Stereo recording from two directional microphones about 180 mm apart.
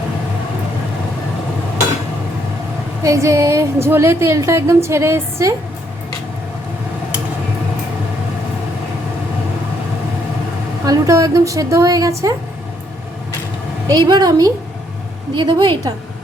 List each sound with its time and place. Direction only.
3.0 s a woman's voice: 15° right (ahead or behind)
10.8 s a woman's voice: 20° right (ahead or behind)
13.8 s a woman's voice: 25° right (ahead or behind)